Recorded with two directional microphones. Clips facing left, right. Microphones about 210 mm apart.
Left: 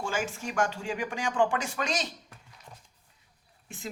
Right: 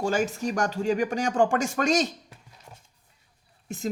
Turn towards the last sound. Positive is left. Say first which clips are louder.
# right 10 dB
turn(degrees=-40)  # may be behind; listen again after turning